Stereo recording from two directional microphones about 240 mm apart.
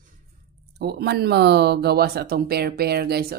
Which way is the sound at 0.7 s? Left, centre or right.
Right.